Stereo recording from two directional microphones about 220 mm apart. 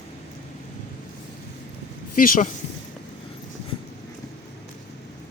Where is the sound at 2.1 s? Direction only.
40° left (ahead or behind).